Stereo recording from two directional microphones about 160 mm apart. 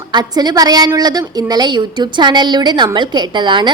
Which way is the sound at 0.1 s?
25° right (ahead or behind).